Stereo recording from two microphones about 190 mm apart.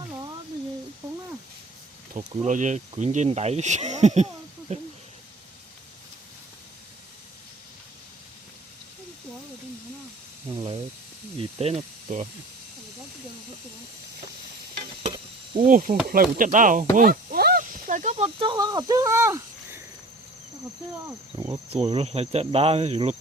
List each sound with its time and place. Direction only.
2.3 s speech: 40° right (ahead or behind)
11.5 s speech: 35° right (ahead or behind)
15.0 s stir: 25° right (ahead or behind)
15.6 s chop: 45° right (ahead or behind)
16.9 s snake: 45° right (ahead or behind); by 18.5 s 30° right (ahead or behind)
18.5 s cricket: 20° right (ahead or behind)
21.3 s cricket: 20° right (ahead or behind)
21.7 s speech: 35° right (ahead or behind)